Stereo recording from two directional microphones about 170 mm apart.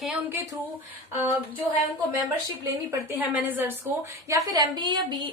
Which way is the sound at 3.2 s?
10° right (ahead or behind).